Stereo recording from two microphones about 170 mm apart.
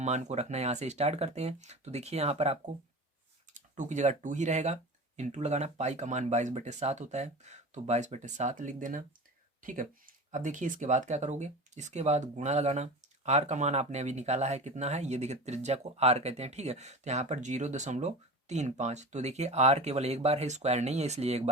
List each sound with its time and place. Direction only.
0.0 s speech: 40° right (ahead or behind)
10.3 s speech: 45° right (ahead or behind)